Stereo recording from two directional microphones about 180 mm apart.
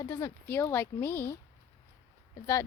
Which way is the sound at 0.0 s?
20° left (ahead or behind).